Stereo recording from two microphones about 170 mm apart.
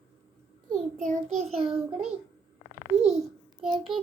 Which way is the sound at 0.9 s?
45° right (ahead or behind).